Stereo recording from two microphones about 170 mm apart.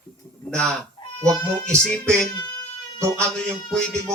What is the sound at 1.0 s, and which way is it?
Goose, 25° left (ahead or behind).